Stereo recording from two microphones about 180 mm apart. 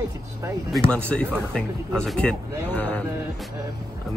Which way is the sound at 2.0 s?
5° left (ahead or behind).